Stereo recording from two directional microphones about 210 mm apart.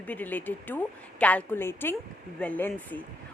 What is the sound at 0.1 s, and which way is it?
A woman's voice, 10° left (ahead or behind).